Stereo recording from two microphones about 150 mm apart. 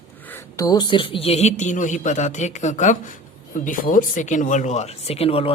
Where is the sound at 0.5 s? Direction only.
25° left (ahead or behind).